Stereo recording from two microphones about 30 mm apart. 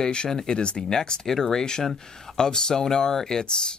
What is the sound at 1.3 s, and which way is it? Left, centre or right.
Speech, centre.